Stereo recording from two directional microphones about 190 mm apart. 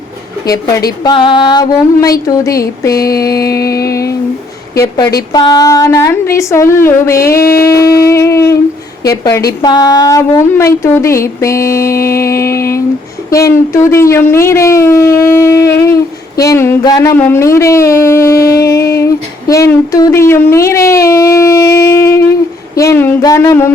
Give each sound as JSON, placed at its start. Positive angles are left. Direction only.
{"t": 1.0, "sound": "a woman's voice", "side_deg": 25}
{"t": 3.6, "sound": "music", "side_deg": 15}
{"t": 5.3, "sound": "a woman's voice", "side_deg": 20}
{"t": 7.5, "sound": "a sound", "side_deg": 15}
{"t": 9.0, "sound": "a woman's voice", "side_deg": 15}